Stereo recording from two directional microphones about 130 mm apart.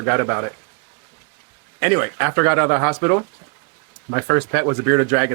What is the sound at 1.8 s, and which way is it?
A man's voice, 20° right (ahead or behind).